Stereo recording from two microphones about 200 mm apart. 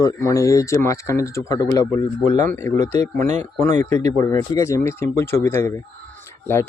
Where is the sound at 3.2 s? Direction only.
35° right (ahead or behind).